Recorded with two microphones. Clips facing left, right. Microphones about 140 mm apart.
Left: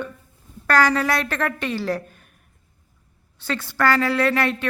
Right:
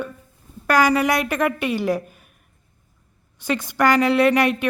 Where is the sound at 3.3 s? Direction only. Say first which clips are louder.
Right 3 dB; 15° right (ahead or behind).